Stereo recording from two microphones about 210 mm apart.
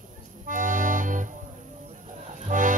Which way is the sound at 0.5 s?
40° right (ahead or behind).